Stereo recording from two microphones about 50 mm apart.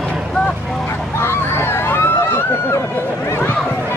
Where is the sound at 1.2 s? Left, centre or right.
Left.